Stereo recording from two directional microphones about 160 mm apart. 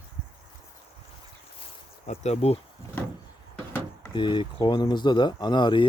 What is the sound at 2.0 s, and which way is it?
Speech, 45° left (ahead or behind).